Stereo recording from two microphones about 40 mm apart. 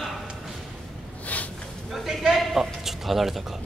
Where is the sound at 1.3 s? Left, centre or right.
Left.